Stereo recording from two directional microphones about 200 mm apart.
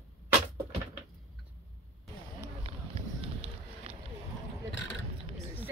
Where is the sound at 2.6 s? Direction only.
30° right (ahead or behind).